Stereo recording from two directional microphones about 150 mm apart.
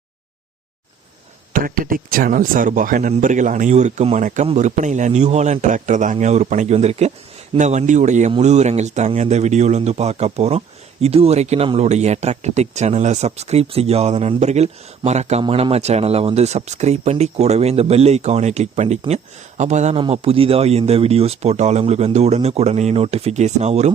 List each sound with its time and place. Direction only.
1.5 s a man's voice: 70° right (ahead or behind); by 20.0 s 50° right (ahead or behind)
20.0 s speech: 40° right (ahead or behind)